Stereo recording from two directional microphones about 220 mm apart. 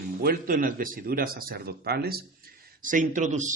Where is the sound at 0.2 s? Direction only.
40° right (ahead or behind).